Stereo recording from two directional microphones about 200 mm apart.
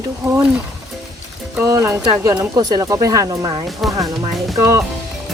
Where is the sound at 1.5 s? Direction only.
15° right (ahead or behind).